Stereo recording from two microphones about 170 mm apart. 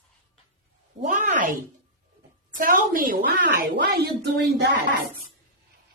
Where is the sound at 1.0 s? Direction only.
50° right (ahead or behind).